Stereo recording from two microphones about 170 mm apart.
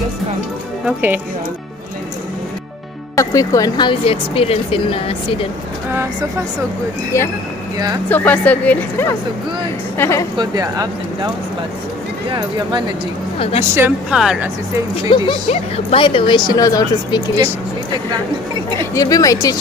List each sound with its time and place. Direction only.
0.8 s a woman's voice: 10° right (ahead or behind)
3.2 s speech: 20° left (ahead or behind)
7.1 s a woman's voice: 15° left (ahead or behind)
10.3 s speech: 25° right (ahead or behind)
12.3 s speech: 30° right (ahead or behind)
13.4 s a woman's voice: 35° left (ahead or behind)
13.7 s a woman's voice: 5° right (ahead or behind)
15.0 s speech: 30° left (ahead or behind)
18.8 s speech: 20° left (ahead or behind)